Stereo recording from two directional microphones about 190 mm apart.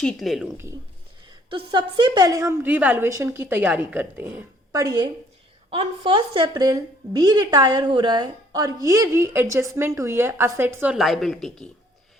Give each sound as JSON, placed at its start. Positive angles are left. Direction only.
{"t": 0.0, "sound": "a woman's voice", "side_deg": 0}
{"t": 1.5, "sound": "a woman's voice", "side_deg": -25}